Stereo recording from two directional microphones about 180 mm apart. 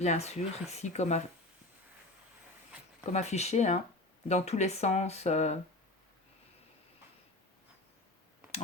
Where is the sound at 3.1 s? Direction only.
40° left (ahead or behind).